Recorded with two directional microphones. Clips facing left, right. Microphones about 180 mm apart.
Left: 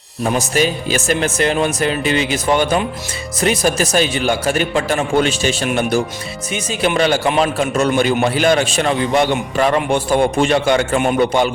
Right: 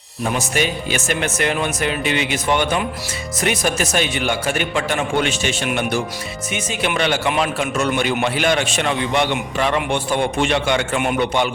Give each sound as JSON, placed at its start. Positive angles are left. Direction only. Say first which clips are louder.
{"t": 0.3, "sound": "speech", "louder": "left 4 dB", "side_deg": 35}